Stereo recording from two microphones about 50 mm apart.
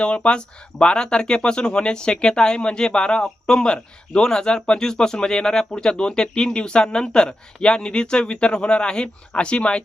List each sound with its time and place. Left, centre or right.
0.0 s speech: left